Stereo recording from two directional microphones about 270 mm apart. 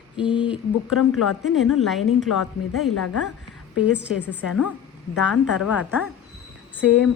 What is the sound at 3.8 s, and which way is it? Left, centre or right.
Speech, centre.